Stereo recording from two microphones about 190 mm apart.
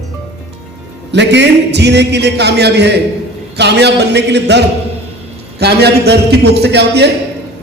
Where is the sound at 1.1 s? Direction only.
65° right (ahead or behind).